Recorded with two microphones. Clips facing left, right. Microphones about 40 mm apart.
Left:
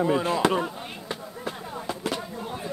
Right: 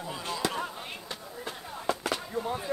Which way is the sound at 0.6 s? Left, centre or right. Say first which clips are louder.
Left 5 dB; centre.